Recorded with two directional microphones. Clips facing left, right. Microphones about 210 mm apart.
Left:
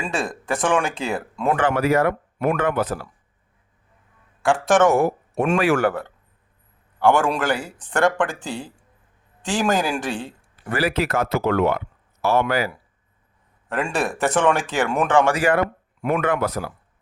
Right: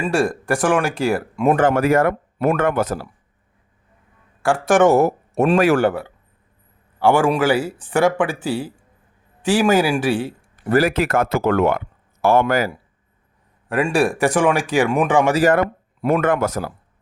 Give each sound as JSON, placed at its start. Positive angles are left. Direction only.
{"t": 0.0, "sound": "speech", "side_deg": -10}
{"t": 1.5, "sound": "speech", "side_deg": -45}
{"t": 4.5, "sound": "speech", "side_deg": -10}
{"t": 4.9, "sound": "speech", "side_deg": -40}
{"t": 7.0, "sound": "a man's voice", "side_deg": -10}
{"t": 10.7, "sound": "speech", "side_deg": -45}
{"t": 13.7, "sound": "speech", "side_deg": -10}
{"t": 15.4, "sound": "speech", "side_deg": -40}